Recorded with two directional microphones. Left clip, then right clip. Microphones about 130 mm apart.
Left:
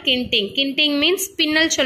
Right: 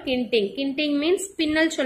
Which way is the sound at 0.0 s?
30° left (ahead or behind).